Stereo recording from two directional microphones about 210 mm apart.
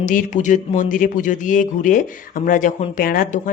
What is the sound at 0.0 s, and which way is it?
Speech, 40° left (ahead or behind).